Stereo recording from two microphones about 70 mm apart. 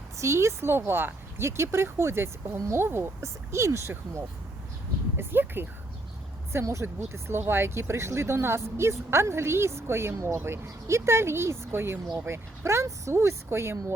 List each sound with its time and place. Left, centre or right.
0.2 s speech: right
5.1 s speech: right
6.5 s speech: right